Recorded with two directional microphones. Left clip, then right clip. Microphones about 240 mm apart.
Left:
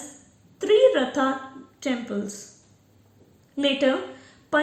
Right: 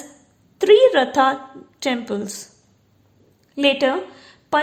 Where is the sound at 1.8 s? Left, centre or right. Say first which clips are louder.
Right 5 dB; right.